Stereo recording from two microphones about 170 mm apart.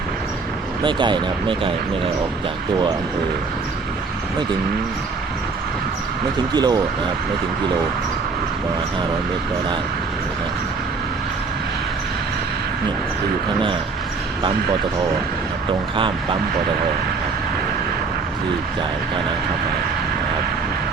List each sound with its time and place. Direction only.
0.9 s speech: 25° right (ahead or behind)
6.5 s speech: 25° right (ahead or behind)
16.0 s speech: 30° right (ahead or behind)